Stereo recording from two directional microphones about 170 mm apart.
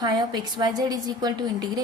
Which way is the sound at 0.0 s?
25° right (ahead or behind).